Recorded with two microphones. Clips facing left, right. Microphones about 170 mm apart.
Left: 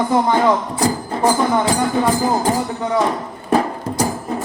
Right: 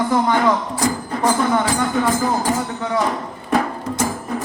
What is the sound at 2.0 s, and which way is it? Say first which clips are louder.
Music: left 2 dB; 30° left (ahead or behind).